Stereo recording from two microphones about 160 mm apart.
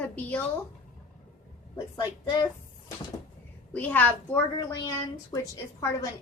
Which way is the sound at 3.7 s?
10° left (ahead or behind).